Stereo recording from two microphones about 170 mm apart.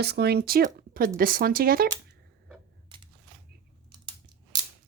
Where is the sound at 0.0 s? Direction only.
75° right (ahead or behind).